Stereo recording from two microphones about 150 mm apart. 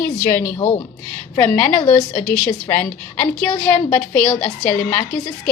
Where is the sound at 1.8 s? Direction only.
50° left (ahead or behind).